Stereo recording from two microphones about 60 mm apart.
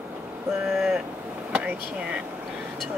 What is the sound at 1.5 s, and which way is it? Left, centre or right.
Speech, centre.